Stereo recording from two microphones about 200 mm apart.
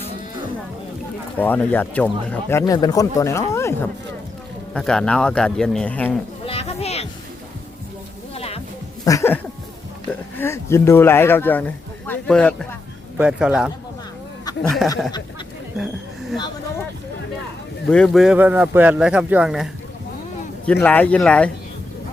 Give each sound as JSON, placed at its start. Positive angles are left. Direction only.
{"t": 1.4, "sound": "speech", "side_deg": 10}
{"t": 6.4, "sound": "a sound", "side_deg": 30}
{"t": 8.4, "sound": "music", "side_deg": 30}
{"t": 9.0, "sound": "speech", "side_deg": 15}
{"t": 13.1, "sound": "speech", "side_deg": -5}
{"t": 14.8, "sound": "speech", "side_deg": 0}
{"t": 17.8, "sound": "speech", "side_deg": 5}